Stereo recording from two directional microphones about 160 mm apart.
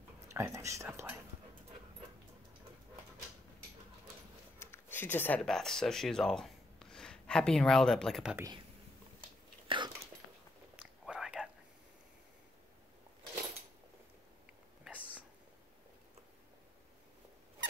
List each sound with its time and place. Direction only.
0.3 s speech: 15° right (ahead or behind)
4.6 s speech: 15° left (ahead or behind); by 8.4 s centre (ahead or behind)
9.7 s whispering: 30° right (ahead or behind)
10.8 s whispering: 5° right (ahead or behind)